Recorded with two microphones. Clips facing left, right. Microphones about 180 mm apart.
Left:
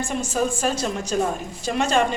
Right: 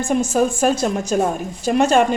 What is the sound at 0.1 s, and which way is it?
Speech, 50° right (ahead or behind).